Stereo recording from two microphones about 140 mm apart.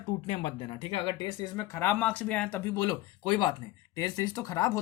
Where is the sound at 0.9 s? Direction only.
35° left (ahead or behind).